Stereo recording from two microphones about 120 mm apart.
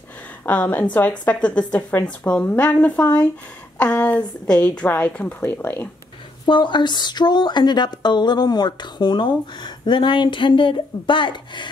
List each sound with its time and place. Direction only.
0.5 s a woman's voice: 10° left (ahead or behind)
6.4 s speech: 40° left (ahead or behind)